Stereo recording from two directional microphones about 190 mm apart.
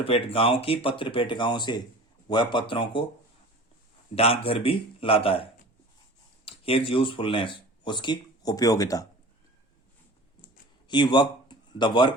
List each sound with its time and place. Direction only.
0.0 s speech: 30° left (ahead or behind)
4.1 s speech: 30° left (ahead or behind)
10.8 s speech: 25° left (ahead or behind)